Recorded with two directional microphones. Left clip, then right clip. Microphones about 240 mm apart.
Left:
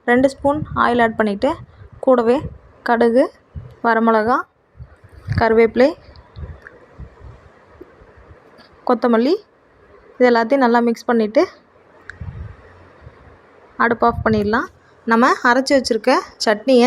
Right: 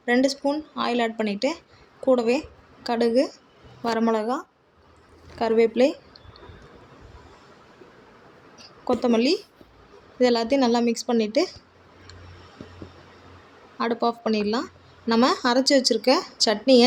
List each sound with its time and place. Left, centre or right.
0.0 s a woman's voice: centre
8.5 s a woman's voice: centre
13.7 s a woman's voice: centre